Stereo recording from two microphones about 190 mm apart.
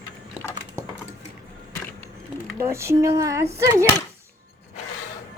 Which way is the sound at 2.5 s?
15° right (ahead or behind).